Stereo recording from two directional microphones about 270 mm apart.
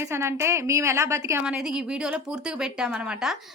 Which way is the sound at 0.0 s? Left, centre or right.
Centre.